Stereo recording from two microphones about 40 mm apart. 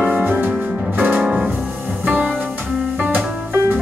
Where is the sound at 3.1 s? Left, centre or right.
Right.